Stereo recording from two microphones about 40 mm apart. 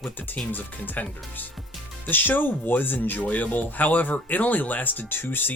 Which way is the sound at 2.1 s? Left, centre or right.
Left.